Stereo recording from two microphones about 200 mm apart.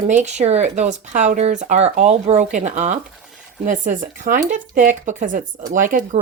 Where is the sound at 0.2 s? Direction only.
35° right (ahead or behind).